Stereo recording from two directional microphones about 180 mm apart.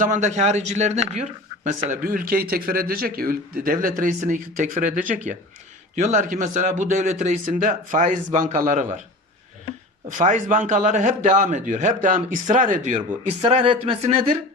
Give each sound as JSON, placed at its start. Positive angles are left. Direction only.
{"t": 0.1, "sound": "speech", "side_deg": -40}
{"t": 10.1, "sound": "speech", "side_deg": -45}